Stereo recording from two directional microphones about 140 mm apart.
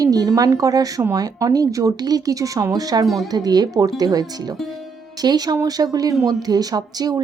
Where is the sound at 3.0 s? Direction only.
Centre (ahead or behind).